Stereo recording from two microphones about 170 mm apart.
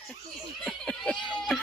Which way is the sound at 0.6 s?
5° left (ahead or behind).